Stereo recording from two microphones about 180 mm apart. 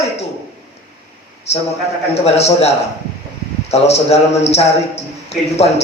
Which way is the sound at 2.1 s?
35° left (ahead or behind).